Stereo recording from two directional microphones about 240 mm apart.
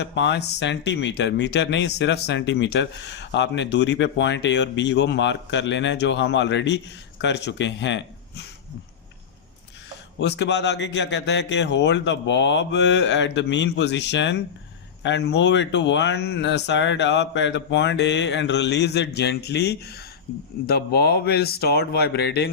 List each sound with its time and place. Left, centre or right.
0.0 s speech: left
10.2 s speech: left